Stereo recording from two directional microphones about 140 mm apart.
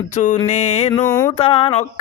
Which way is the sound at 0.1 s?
60° left (ahead or behind).